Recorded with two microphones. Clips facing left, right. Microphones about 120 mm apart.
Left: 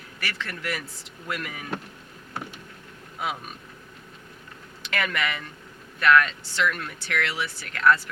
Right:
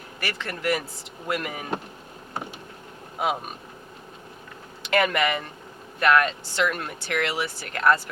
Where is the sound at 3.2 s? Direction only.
45° right (ahead or behind).